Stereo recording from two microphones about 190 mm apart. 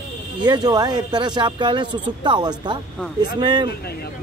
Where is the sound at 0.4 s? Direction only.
20° right (ahead or behind).